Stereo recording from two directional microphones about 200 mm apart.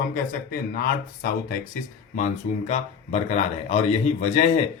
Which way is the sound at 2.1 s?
35° left (ahead or behind).